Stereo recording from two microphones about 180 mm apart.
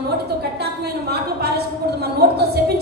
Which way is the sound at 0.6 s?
65° right (ahead or behind).